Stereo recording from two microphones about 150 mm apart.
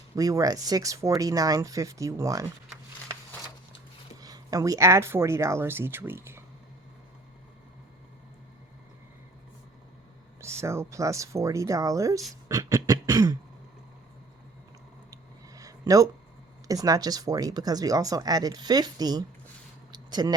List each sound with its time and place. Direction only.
0.2 s speech: 25° right (ahead or behind)
4.2 s speech: 25° right (ahead or behind)
10.6 s speech: 20° right (ahead or behind)
12.5 s beatboxing: 20° right (ahead or behind)
15.1 s a sound: 25° right (ahead or behind)
16.6 s speech: 25° right (ahead or behind)
19.9 s a sound: 25° right (ahead or behind)